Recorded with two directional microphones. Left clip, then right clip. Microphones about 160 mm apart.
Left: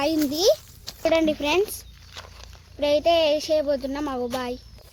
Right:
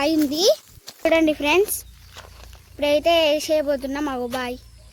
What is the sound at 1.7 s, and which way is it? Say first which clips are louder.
Zipper: right 4 dB; 5° left (ahead or behind).